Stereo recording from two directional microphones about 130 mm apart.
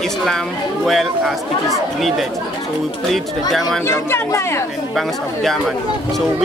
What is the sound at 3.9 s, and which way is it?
Speech, 20° left (ahead or behind).